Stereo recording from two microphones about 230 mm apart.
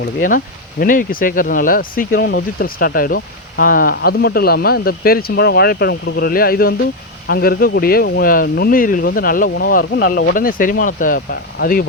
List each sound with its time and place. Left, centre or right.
0.0 s speech: left